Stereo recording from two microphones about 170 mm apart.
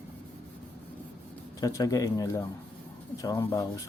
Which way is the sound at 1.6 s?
20° left (ahead or behind).